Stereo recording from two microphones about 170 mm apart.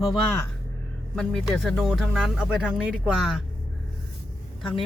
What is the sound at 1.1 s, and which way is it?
Speech, 5° left (ahead or behind).